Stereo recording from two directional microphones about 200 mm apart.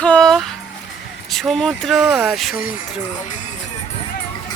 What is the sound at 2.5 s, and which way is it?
Speech, 45° left (ahead or behind).